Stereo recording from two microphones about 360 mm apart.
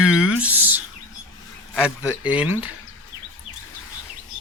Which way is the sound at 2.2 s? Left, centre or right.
Centre.